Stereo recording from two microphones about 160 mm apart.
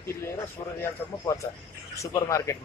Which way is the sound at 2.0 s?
20° left (ahead or behind).